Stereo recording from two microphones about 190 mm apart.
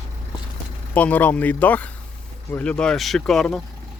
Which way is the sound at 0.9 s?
10° left (ahead or behind).